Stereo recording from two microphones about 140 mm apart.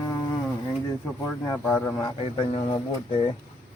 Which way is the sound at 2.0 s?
35° left (ahead or behind).